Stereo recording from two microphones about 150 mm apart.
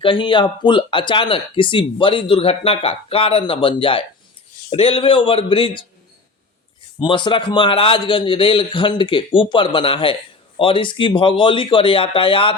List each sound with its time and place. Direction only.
0.0 s speech: 35° left (ahead or behind)
7.0 s speech: 30° left (ahead or behind)